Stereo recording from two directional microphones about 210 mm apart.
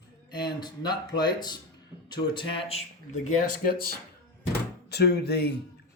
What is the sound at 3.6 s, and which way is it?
Speech, 45° left (ahead or behind).